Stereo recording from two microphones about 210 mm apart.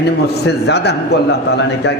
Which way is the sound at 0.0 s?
55° left (ahead or behind).